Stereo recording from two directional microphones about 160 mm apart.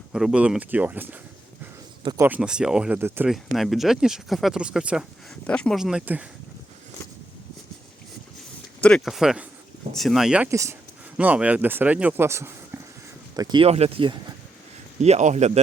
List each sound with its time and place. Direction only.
0.1 s speech: 5° right (ahead or behind)
2.2 s speech: 10° right (ahead or behind)
5.5 s speech: 5° left (ahead or behind)
8.8 s speech: centre (ahead or behind)
10.5 s speech: 20° right (ahead or behind)
13.7 s speech: 40° right (ahead or behind)
15.0 s a man's voice: 45° right (ahead or behind)